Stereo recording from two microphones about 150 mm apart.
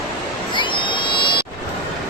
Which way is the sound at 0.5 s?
35° left (ahead or behind).